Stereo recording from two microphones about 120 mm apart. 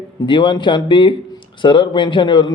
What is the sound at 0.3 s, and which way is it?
A man's voice, 40° left (ahead or behind).